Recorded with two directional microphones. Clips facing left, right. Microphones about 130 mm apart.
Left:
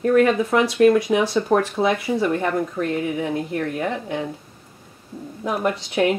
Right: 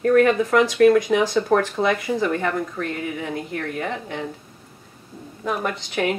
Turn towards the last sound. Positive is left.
turn(degrees=5)  # may be behind; listen again after turning